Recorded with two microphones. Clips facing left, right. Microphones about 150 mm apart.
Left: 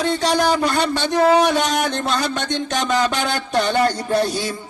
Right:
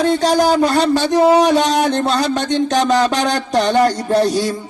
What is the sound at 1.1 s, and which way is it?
Speech, 15° right (ahead or behind).